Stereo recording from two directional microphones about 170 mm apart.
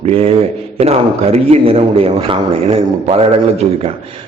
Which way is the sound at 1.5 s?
35° right (ahead or behind).